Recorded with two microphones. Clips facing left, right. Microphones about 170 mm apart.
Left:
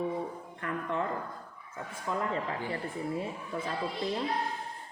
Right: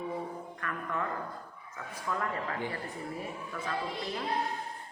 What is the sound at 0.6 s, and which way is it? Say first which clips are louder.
Speech: left 4 dB; 25° left (ahead or behind).